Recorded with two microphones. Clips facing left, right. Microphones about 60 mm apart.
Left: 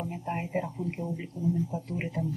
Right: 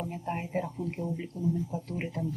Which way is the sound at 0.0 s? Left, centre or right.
Centre.